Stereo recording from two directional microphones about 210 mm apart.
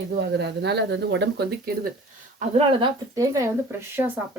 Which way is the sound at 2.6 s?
25° right (ahead or behind).